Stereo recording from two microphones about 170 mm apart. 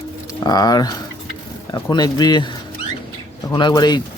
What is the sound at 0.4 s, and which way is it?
Speech, 25° left (ahead or behind).